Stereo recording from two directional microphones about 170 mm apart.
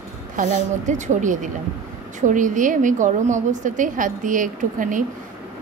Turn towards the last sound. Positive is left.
turn(degrees=-50)  # may be behind; listen again after turning